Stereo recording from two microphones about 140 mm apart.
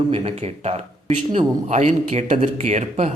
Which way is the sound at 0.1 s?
45° right (ahead or behind).